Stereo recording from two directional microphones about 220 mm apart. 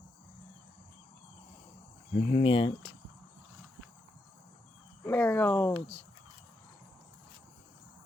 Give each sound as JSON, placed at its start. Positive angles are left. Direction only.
{"t": 2.1, "sound": "speech", "side_deg": 25}
{"t": 5.0, "sound": "speech", "side_deg": 10}